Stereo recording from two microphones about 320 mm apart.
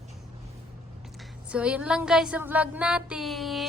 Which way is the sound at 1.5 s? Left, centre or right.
Centre.